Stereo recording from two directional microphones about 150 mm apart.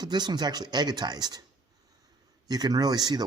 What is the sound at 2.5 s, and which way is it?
Speech, 25° right (ahead or behind).